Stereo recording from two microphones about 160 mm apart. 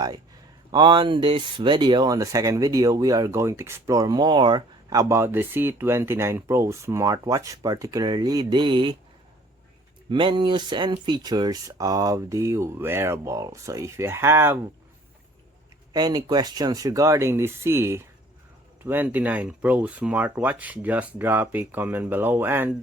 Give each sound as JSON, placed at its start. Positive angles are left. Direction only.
{"t": 0.7, "sound": "speech", "side_deg": -30}
{"t": 10.1, "sound": "speech", "side_deg": -30}
{"t": 15.9, "sound": "speech", "side_deg": -25}